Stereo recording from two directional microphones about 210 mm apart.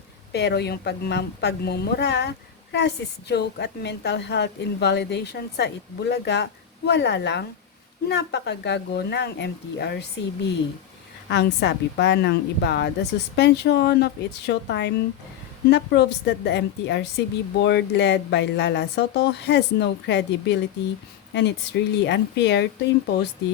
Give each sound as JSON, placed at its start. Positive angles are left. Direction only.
{"t": 0.3, "sound": "a woman's voice", "side_deg": 50}